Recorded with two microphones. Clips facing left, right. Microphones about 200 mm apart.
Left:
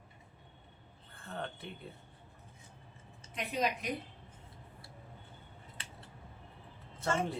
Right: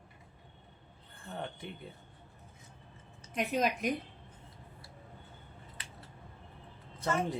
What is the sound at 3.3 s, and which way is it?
Speech, 50° right (ahead or behind).